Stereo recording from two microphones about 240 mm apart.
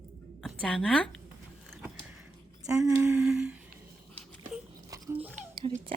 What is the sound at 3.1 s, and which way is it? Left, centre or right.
Humming, centre.